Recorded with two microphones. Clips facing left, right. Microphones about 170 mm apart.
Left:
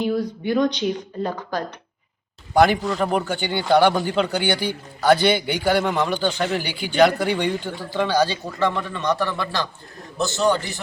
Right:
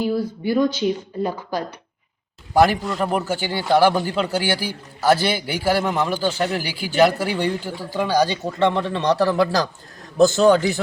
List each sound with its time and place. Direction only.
0.0 s a man's voice: 5° right (ahead or behind)
8.4 s a man's voice: 25° right (ahead or behind)
10.2 s a man's voice: 50° right (ahead or behind)